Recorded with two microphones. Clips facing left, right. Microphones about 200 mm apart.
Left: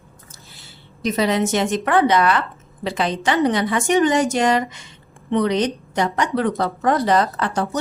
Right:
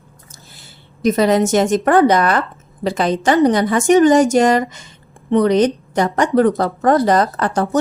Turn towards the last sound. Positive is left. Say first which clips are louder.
# right 5 dB
turn(degrees=-45)  # may be behind; listen again after turning